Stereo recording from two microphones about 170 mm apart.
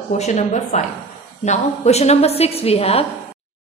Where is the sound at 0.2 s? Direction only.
45° left (ahead or behind).